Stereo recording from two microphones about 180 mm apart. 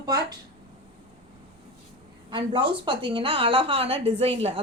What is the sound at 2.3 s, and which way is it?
A woman's voice, 25° right (ahead or behind).